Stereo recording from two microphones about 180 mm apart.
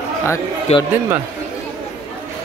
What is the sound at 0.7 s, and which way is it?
Speech, 35° left (ahead or behind).